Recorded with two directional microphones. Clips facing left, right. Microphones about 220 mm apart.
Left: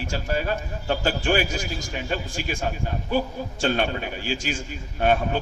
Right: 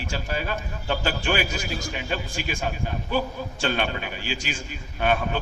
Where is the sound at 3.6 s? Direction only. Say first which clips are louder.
Left 3 dB; 45° left (ahead or behind).